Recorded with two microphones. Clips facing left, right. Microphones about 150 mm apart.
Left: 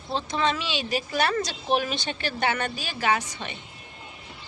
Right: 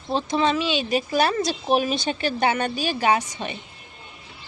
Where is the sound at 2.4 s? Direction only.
20° right (ahead or behind).